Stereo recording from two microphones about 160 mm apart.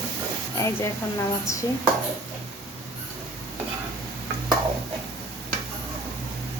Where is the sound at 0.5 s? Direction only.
15° left (ahead or behind).